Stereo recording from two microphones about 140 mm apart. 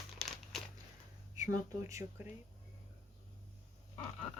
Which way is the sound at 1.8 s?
20° right (ahead or behind).